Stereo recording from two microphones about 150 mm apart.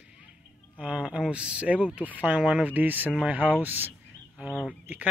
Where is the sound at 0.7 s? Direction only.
10° right (ahead or behind).